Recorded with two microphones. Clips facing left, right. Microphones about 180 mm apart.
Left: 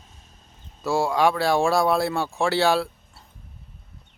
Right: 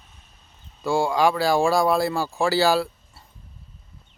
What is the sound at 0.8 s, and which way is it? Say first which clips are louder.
Speech: right 1 dB; centre (ahead or behind).